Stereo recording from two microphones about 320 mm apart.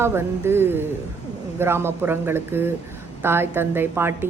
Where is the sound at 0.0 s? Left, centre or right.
Centre.